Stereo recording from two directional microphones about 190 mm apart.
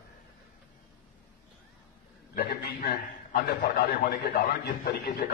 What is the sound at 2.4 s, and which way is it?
A man's voice, 55° left (ahead or behind).